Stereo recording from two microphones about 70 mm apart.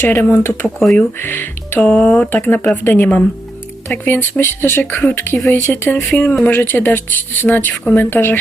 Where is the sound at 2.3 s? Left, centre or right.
Left.